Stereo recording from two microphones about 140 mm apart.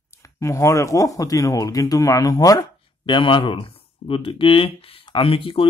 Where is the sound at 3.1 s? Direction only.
35° left (ahead or behind).